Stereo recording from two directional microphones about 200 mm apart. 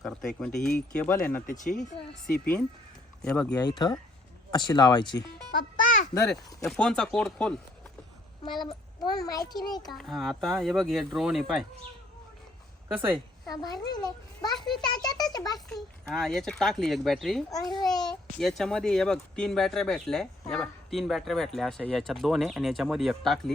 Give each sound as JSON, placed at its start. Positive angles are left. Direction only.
{"t": 0.0, "sound": "speech", "side_deg": 0}
{"t": 1.5, "sound": "speech", "side_deg": 40}
{"t": 3.2, "sound": "speech", "side_deg": 5}
{"t": 3.5, "sound": "a child's voice", "side_deg": 20}
{"t": 5.5, "sound": "music", "side_deg": 40}
{"t": 6.2, "sound": "speech", "side_deg": 0}
{"t": 8.4, "sound": "a child's voice", "side_deg": 25}
{"t": 9.9, "sound": "speech", "side_deg": 0}
{"t": 13.5, "sound": "a child's voice", "side_deg": 20}
{"t": 15.7, "sound": "speech", "side_deg": 0}
{"t": 17.7, "sound": "a child's voice", "side_deg": 20}
{"t": 18.3, "sound": "speech", "side_deg": 0}